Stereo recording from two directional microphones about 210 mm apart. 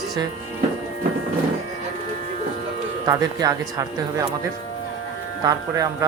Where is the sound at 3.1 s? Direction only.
15° right (ahead or behind).